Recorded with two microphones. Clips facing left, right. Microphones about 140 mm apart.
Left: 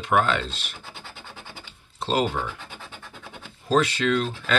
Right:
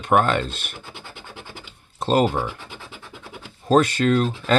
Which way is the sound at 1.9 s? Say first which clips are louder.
Right 5 dB; 50° right (ahead or behind).